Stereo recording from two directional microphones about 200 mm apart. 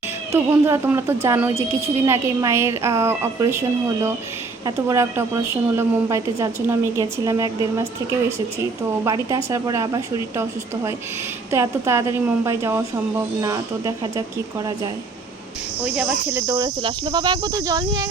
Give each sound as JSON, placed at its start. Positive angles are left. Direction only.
{"t": 0.3, "sound": "a woman's voice", "side_deg": -10}
{"t": 11.5, "sound": "a woman's voice", "side_deg": -15}
{"t": 15.8, "sound": "speech", "side_deg": -10}